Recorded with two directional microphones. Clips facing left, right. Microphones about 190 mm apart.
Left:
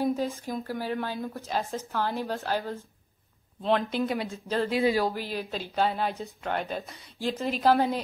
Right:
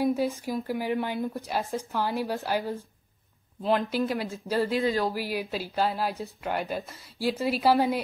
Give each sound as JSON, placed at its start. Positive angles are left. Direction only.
{"t": 0.0, "sound": "speech", "side_deg": -15}
{"t": 3.6, "sound": "speech", "side_deg": -5}
{"t": 5.1, "sound": "speech", "side_deg": -10}